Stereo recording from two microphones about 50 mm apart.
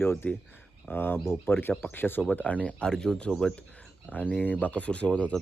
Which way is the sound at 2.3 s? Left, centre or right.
Left.